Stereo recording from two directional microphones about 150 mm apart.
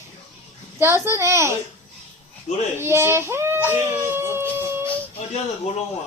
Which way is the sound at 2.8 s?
15° right (ahead or behind).